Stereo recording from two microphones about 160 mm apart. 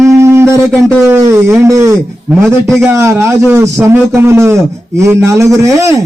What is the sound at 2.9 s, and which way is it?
A man's voice, 15° right (ahead or behind).